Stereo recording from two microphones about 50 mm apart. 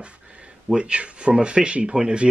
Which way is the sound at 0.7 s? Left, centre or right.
Right.